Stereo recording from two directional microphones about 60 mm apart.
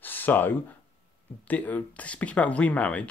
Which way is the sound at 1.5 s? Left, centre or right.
Left.